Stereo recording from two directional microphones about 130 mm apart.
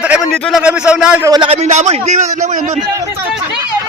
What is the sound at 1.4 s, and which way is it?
Speech, 55° right (ahead or behind).